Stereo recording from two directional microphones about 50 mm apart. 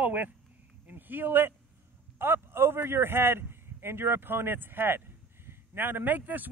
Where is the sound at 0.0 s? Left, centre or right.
Right.